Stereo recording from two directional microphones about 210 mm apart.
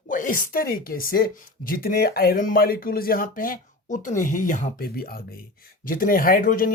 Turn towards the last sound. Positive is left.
turn(degrees=40)  # may be behind; listen again after turning